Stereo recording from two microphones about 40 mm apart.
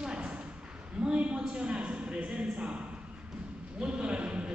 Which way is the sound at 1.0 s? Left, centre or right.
Right.